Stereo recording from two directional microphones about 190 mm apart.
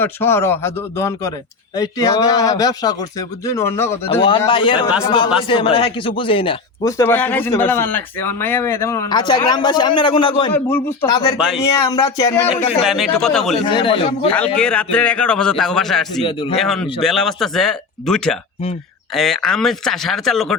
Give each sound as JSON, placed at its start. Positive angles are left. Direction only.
{"t": 0.0, "sound": "speech", "side_deg": 10}
{"t": 4.2, "sound": "speech", "side_deg": 25}
{"t": 10.5, "sound": "speech", "side_deg": 10}
{"t": 12.8, "sound": "a man's voice", "side_deg": 0}
{"t": 13.7, "sound": "speech", "side_deg": 25}
{"t": 14.3, "sound": "a man's voice", "side_deg": 5}
{"t": 16.2, "sound": "speech", "side_deg": 30}
{"t": 16.6, "sound": "a man's voice", "side_deg": 0}